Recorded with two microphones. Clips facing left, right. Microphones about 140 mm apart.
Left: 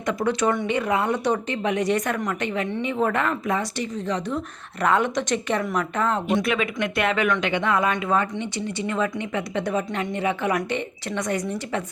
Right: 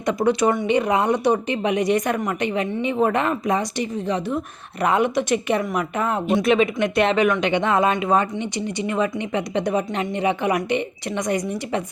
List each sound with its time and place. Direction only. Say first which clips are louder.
0.0 s speech: right 4 dB; 15° right (ahead or behind)
6.4 s speech: right 6 dB; 25° right (ahead or behind)